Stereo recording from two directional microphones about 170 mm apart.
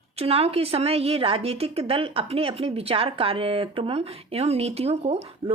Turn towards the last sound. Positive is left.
turn(degrees=-35)  # may be behind; listen again after turning